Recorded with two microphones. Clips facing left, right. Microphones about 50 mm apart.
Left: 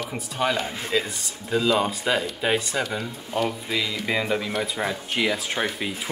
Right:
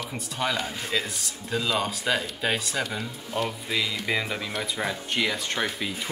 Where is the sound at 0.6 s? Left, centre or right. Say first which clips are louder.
Left 2 dB; centre.